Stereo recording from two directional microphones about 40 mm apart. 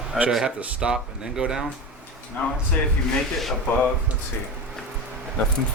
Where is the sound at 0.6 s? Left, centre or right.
Right.